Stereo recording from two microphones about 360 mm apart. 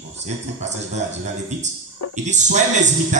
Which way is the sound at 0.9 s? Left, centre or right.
Centre.